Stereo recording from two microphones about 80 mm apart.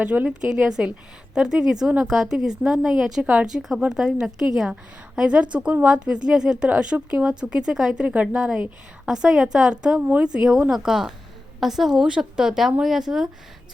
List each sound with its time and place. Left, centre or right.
0.0 s a woman's voice: centre
10.0 s speech: right
10.3 s a woman's voice: centre